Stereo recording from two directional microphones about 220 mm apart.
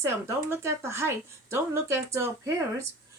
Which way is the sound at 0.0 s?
15° right (ahead or behind).